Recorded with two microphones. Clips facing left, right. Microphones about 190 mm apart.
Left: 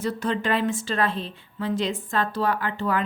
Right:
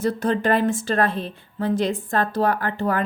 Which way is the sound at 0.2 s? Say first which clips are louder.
Right 3 dB; 45° right (ahead or behind).